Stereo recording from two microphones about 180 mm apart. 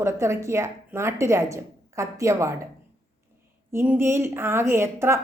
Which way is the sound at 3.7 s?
10° right (ahead or behind).